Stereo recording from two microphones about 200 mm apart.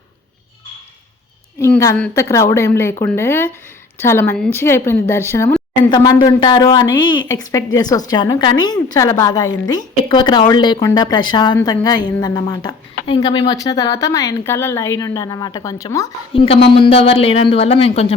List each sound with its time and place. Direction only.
1.5 s a woman's voice: 15° left (ahead or behind)
16.3 s a woman's voice: 25° left (ahead or behind)